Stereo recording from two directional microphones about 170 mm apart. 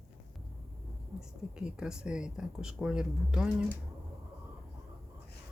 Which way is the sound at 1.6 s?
5° right (ahead or behind).